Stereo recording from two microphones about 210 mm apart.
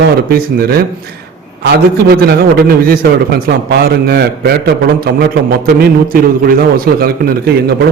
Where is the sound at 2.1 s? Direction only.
50° right (ahead or behind).